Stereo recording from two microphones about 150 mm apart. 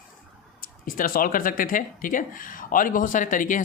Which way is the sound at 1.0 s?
70° left (ahead or behind).